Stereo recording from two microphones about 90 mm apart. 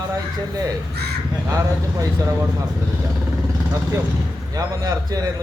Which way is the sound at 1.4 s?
30° right (ahead or behind).